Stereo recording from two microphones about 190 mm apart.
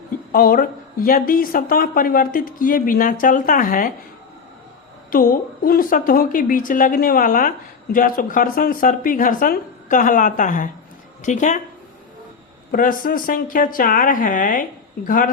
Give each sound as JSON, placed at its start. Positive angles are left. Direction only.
{"t": 0.3, "sound": "a woman's voice", "side_deg": 50}
{"t": 5.1, "sound": "a woman's voice", "side_deg": 50}
{"t": 12.7, "sound": "a woman's voice", "side_deg": 45}